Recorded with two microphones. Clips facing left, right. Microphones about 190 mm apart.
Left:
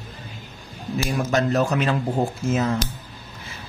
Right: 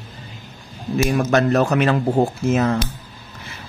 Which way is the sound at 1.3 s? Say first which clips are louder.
Right 2 dB; 65° right (ahead or behind).